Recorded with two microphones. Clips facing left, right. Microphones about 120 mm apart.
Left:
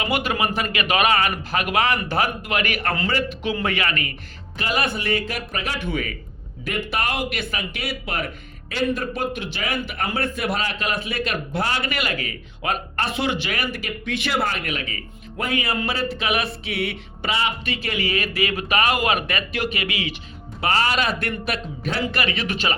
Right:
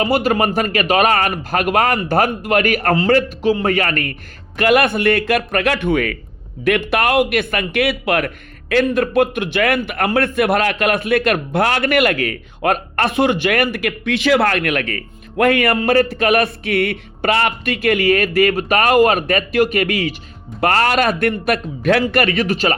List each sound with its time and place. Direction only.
0.0 s a man's voice: 35° right (ahead or behind)
20.6 s speech: 55° right (ahead or behind); by 22.7 s 40° right (ahead or behind)